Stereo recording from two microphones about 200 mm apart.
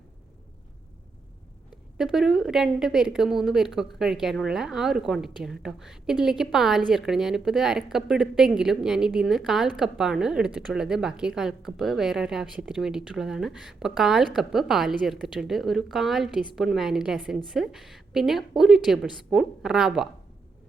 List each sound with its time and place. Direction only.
2.0 s a woman's voice: centre (ahead or behind)